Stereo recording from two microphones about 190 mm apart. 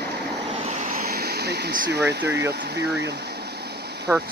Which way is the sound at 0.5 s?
35° right (ahead or behind).